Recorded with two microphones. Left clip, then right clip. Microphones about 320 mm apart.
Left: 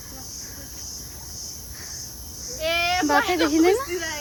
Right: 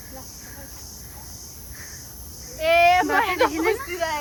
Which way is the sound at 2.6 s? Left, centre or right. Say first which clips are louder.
Right 6 dB; right.